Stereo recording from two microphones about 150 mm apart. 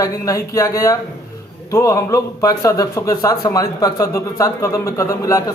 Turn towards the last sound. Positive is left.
turn(degrees=20)  # may be behind; listen again after turning